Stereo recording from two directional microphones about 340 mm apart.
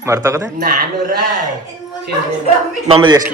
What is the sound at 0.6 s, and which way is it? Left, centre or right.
Speech, right.